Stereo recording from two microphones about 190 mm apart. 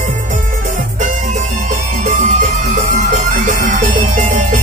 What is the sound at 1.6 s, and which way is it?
Music, 40° right (ahead or behind).